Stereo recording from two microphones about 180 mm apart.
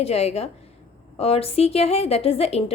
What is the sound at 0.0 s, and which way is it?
A woman's voice, 35° left (ahead or behind).